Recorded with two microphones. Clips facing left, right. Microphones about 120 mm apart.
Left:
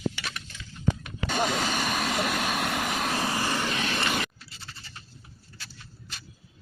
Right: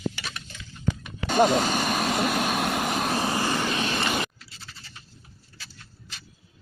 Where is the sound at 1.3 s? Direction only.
30° right (ahead or behind).